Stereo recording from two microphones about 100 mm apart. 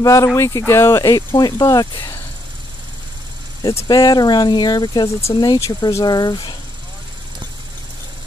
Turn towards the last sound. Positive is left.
turn(degrees=45)  # may be behind; listen again after turning